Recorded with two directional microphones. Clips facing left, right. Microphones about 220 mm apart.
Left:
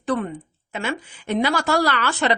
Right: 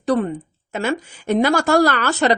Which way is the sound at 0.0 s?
40° right (ahead or behind).